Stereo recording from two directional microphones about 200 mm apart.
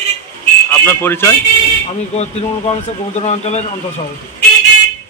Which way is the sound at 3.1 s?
35° left (ahead or behind).